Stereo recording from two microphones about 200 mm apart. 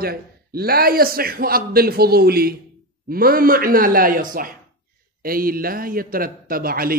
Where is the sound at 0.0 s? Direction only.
50° right (ahead or behind).